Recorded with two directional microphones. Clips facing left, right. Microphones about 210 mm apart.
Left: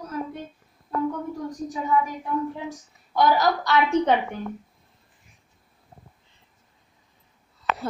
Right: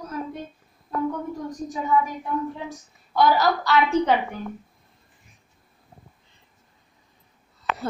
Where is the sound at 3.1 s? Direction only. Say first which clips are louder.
Right 1 dB; 15° left (ahead or behind).